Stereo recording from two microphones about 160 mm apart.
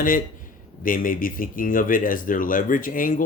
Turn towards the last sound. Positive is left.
turn(degrees=60)  # may be behind; listen again after turning